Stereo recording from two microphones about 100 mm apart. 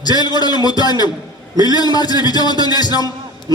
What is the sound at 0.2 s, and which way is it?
A man's voice, 45° left (ahead or behind).